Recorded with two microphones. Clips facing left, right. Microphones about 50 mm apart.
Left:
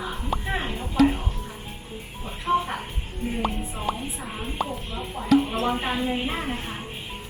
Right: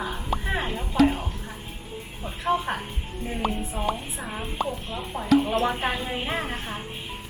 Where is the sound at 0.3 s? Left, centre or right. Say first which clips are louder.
Even; centre.